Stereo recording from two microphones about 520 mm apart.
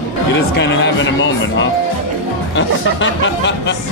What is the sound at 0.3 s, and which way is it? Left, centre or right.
Speech, centre.